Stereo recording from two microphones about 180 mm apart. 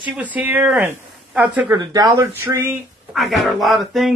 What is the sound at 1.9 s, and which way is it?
Speech, 20° right (ahead or behind).